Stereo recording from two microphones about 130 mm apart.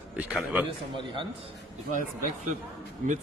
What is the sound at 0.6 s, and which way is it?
Speech, 40° right (ahead or behind).